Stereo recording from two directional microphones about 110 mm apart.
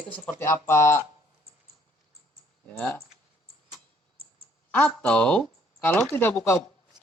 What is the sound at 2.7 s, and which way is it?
Speech, 10° left (ahead or behind).